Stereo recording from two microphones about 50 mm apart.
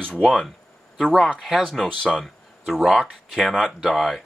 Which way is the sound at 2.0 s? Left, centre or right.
Centre.